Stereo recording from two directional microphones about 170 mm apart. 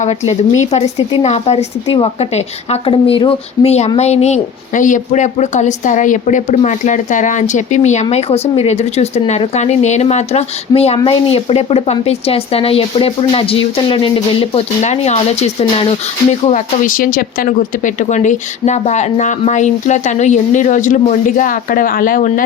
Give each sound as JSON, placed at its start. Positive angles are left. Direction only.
{"t": 0.0, "sound": "a woman's voice", "side_deg": 40}
{"t": 14.5, "sound": "a woman's voice", "side_deg": 40}
{"t": 16.5, "sound": "speech", "side_deg": 50}